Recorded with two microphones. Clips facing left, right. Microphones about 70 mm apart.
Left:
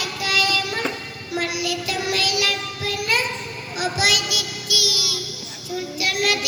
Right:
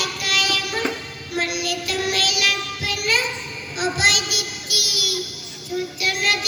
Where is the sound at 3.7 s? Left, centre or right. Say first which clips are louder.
Right 1 dB; right.